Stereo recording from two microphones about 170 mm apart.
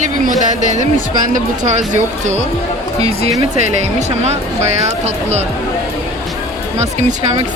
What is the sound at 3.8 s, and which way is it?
Speech, 40° right (ahead or behind).